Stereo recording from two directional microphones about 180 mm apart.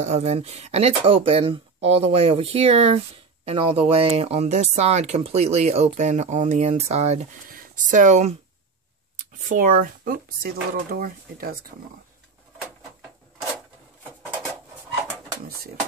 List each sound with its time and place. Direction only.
0.0 s speech: 40° right (ahead or behind)
7.4 s a sound: 50° right (ahead or behind)
9.5 s speech: 50° right (ahead or behind)